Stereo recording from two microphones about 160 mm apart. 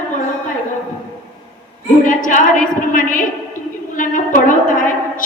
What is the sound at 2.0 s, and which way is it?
A woman's voice, 55° left (ahead or behind).